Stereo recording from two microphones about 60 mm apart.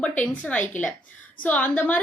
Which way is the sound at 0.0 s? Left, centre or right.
Left.